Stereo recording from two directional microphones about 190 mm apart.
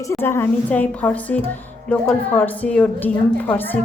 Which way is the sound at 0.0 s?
15° left (ahead or behind).